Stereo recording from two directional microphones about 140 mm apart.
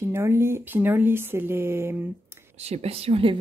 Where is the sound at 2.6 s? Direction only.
45° right (ahead or behind).